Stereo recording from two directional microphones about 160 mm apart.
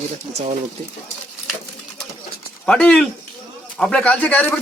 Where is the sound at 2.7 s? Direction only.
5° left (ahead or behind).